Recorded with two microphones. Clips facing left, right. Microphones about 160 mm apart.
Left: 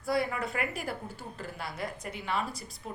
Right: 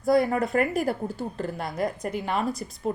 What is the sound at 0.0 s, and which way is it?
Speech, 45° right (ahead or behind).